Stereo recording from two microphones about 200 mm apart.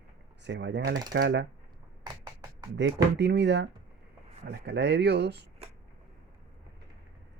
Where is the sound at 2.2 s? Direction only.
20° right (ahead or behind).